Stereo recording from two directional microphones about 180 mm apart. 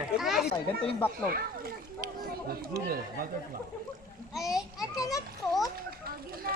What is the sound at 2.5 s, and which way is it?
Speech, 55° right (ahead or behind).